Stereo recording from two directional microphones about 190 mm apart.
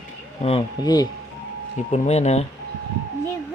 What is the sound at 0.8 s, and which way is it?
Speech, 20° left (ahead or behind).